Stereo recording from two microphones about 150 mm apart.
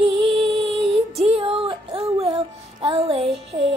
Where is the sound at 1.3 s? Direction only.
35° right (ahead or behind).